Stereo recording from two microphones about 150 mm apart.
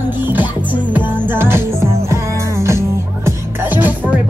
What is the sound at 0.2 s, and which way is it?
Music, 10° right (ahead or behind).